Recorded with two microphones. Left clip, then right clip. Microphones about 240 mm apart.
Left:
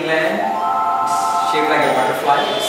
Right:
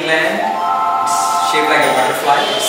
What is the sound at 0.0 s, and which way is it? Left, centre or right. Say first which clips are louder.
A man's voice: right 2 dB; centre.